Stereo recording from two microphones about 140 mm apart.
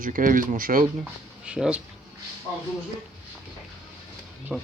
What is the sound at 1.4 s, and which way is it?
Speech, 5° right (ahead or behind).